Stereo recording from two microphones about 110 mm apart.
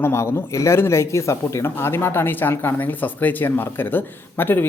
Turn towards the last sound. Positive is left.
turn(degrees=20)  # may be behind; listen again after turning